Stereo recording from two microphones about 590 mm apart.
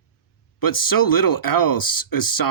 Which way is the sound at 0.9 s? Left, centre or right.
Left.